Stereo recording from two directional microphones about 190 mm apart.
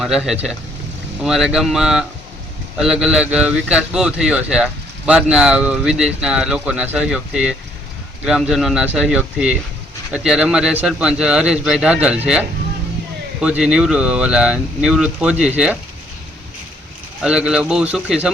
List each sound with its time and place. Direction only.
0.0 s a man's voice: centre (ahead or behind)
17.2 s a man's voice: 5° right (ahead or behind)